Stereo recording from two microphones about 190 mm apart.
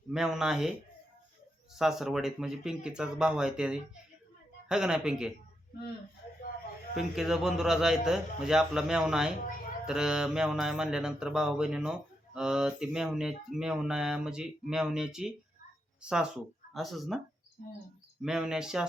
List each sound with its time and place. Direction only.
0.1 s speech: 5° right (ahead or behind)
1.7 s speech: centre (ahead or behind)
6.5 s a sound: 50° left (ahead or behind)
6.9 s speech: centre (ahead or behind)
18.2 s speech: 5° right (ahead or behind)